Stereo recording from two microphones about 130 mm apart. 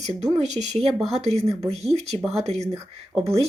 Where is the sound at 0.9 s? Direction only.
Centre (ahead or behind).